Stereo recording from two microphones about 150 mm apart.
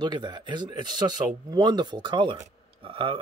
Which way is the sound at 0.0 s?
30° right (ahead or behind).